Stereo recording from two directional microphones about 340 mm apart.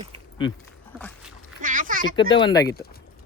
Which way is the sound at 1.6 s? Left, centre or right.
Right.